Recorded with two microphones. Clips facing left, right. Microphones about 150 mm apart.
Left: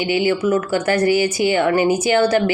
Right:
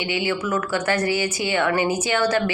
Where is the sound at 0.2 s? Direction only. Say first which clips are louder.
Left 6 dB; 30° left (ahead or behind).